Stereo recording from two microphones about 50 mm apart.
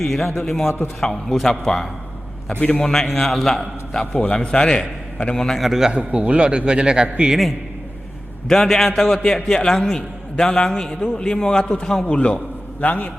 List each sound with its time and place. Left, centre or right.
0.0 s a man's voice: centre
2.5 s a man's voice: left
2.8 s a man's voice: centre
4.1 s a man's voice: left
5.6 s a man's voice: centre
6.0 s a man's voice: right
8.4 s a man's voice: centre
12.8 s a man's voice: left